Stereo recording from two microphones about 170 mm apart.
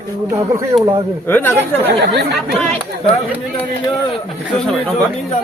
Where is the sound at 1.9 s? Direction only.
75° right (ahead or behind).